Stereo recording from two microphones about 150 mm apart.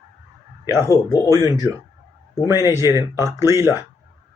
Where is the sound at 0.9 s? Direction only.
25° left (ahead or behind).